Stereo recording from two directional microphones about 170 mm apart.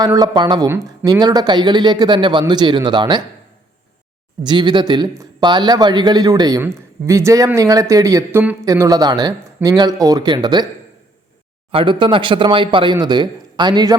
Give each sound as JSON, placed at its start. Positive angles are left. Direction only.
{"t": 0.0, "sound": "a man's voice", "side_deg": -20}
{"t": 4.4, "sound": "a man's voice", "side_deg": -25}
{"t": 11.7, "sound": "a man's voice", "side_deg": -30}